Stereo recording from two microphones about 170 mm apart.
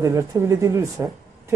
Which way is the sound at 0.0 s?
15° right (ahead or behind).